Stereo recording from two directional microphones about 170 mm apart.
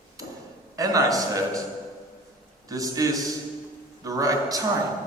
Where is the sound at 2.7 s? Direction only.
20° right (ahead or behind).